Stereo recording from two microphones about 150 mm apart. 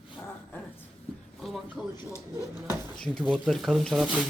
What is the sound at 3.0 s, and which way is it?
Speech, 5° left (ahead or behind).